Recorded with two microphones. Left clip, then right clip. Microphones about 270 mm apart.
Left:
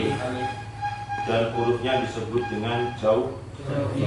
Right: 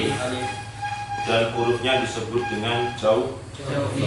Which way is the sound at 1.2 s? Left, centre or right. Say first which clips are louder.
Right 2 dB; centre.